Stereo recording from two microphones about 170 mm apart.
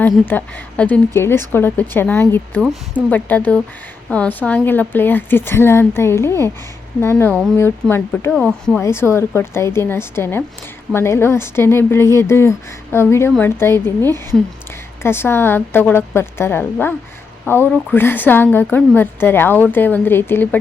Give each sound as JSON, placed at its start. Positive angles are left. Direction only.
{"t": 0.3, "sound": "speech", "side_deg": 10}